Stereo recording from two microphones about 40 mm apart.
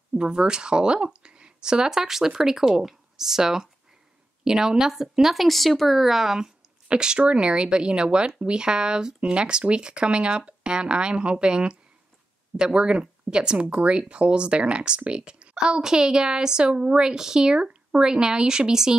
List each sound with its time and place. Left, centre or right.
0.2 s a woman's voice: right
5.3 s speech: centre
6.9 s speech: right